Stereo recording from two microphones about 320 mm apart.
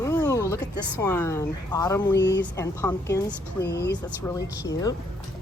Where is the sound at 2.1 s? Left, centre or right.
Left.